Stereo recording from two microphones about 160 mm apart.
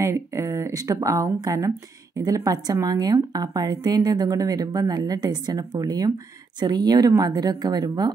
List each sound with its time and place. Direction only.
0.0 s a woman's voice: 20° right (ahead or behind)